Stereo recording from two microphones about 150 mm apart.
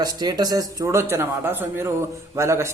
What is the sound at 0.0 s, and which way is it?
A man's voice, 25° right (ahead or behind).